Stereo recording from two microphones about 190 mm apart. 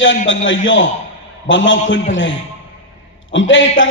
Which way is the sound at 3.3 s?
85° left.